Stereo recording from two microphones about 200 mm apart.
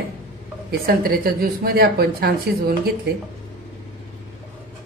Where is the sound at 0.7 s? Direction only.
50° right (ahead or behind).